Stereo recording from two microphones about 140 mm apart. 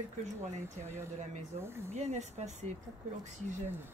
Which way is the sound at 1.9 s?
55° right (ahead or behind).